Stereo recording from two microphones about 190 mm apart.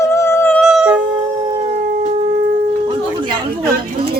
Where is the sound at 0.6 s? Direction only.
Centre (ahead or behind).